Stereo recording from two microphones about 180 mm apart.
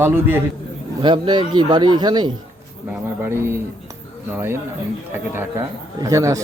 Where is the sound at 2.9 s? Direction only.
10° right (ahead or behind).